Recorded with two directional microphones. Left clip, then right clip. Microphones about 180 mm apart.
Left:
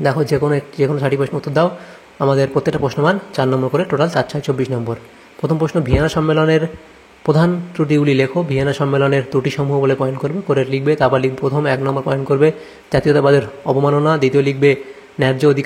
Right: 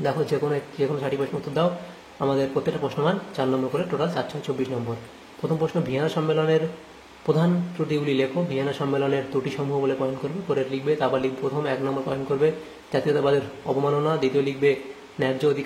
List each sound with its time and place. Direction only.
0.0 s a man's voice: 45° left (ahead or behind)